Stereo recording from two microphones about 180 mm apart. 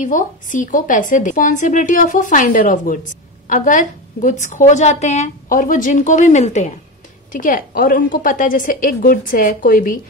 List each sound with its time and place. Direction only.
0.0 s a woman's voice: 45° left (ahead or behind)